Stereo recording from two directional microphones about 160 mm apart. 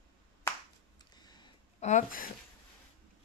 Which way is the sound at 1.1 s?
25° left (ahead or behind).